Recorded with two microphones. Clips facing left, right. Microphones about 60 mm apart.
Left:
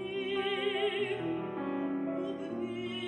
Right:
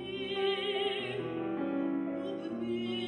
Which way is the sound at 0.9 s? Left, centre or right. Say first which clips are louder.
Left 3 dB; left.